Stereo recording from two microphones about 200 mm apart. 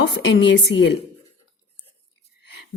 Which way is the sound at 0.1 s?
60° left (ahead or behind).